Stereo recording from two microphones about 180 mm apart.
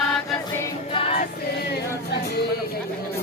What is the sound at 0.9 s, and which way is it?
Music, 30° left (ahead or behind).